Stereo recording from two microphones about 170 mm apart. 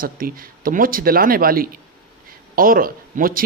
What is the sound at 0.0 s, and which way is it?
Speech, 55° right (ahead or behind).